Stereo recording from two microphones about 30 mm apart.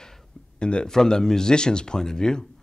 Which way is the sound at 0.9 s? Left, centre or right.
Left.